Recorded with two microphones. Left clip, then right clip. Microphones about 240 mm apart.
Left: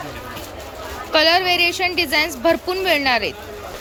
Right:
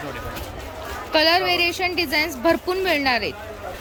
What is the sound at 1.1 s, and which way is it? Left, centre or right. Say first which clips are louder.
A woman's voice: left 3 dB; centre.